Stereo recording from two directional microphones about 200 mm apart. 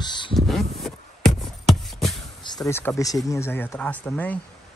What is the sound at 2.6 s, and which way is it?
Speech, 10° left (ahead or behind).